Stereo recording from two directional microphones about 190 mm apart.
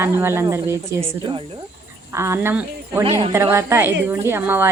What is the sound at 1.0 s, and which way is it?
Speech, 25° right (ahead or behind).